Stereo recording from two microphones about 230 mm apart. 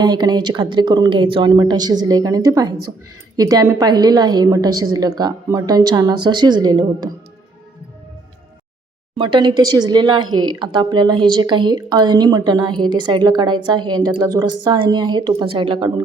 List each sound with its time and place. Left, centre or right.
0.0 s speech: centre
9.1 s a woman's voice: right